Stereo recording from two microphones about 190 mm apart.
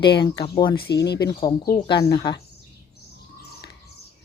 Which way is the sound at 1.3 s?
25° left (ahead or behind).